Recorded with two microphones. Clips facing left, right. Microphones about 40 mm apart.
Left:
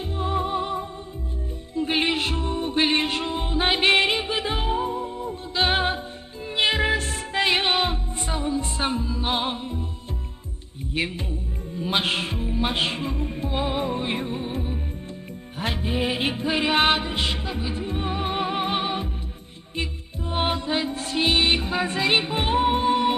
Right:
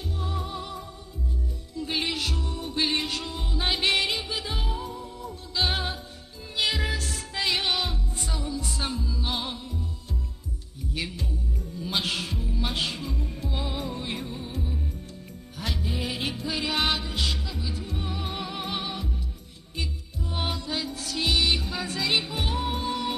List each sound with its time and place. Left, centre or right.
0.2 s music: left
11.0 s music: left